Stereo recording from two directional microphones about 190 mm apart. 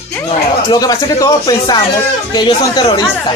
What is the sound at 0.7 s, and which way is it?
Speech, 20° left (ahead or behind).